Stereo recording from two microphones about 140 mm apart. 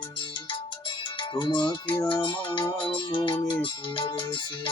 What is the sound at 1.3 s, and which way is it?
Music, 35° left (ahead or behind).